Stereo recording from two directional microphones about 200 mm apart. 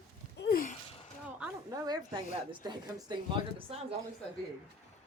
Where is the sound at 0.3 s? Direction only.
50° left (ahead or behind).